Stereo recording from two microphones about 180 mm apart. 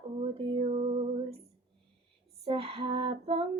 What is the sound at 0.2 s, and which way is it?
Female singing, 30° right (ahead or behind).